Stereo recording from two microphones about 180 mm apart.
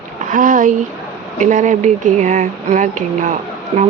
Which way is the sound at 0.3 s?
45° right (ahead or behind).